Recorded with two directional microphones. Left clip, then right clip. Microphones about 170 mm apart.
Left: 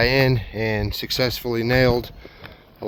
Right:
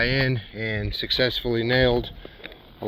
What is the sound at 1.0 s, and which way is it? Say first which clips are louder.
Speech: even; 60° left (ahead or behind).